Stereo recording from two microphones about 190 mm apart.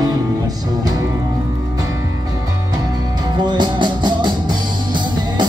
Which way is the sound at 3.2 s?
25° right (ahead or behind).